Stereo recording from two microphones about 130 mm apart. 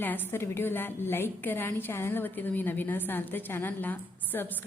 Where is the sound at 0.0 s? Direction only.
15° left (ahead or behind).